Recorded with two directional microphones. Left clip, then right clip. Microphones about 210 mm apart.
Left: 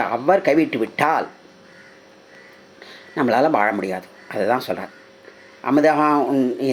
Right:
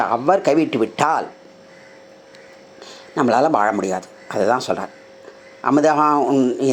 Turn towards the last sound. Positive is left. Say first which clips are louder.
# right 2 dB
turn(degrees=-15)  # may be behind; listen again after turning